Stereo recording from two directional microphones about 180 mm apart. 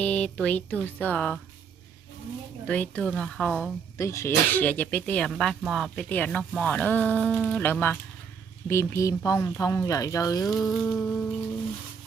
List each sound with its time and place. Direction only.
0.0 s speech: 5° left (ahead or behind)
2.6 s speech: 10° left (ahead or behind)
3.9 s speech: 15° left (ahead or behind)
10.5 s speech: centre (ahead or behind)